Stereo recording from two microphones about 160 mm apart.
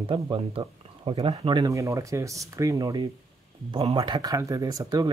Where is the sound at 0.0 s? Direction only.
35° right (ahead or behind).